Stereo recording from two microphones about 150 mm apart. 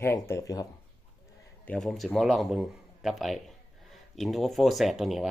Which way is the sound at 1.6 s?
5° left (ahead or behind).